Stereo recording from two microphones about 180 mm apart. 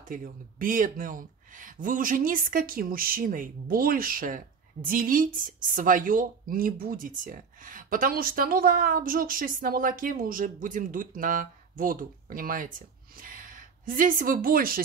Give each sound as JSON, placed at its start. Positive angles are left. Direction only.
{"t": 0.1, "sound": "a woman's voice", "side_deg": -50}